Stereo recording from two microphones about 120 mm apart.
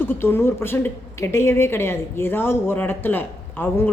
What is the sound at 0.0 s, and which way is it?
A woman's voice, 20° left (ahead or behind).